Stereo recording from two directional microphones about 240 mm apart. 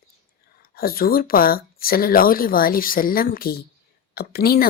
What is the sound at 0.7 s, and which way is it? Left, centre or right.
A woman's voice, left.